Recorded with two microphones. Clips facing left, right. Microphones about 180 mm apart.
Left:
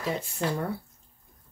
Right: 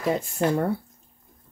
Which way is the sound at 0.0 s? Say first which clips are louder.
Right 6 dB; 50° right (ahead or behind).